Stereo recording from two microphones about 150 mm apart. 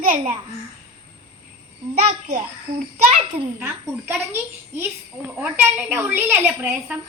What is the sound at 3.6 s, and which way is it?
A child's voice, 15° right (ahead or behind).